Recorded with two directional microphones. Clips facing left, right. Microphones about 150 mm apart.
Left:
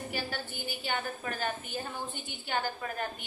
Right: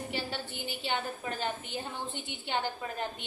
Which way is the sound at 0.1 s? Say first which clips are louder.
Even; 25° right (ahead or behind).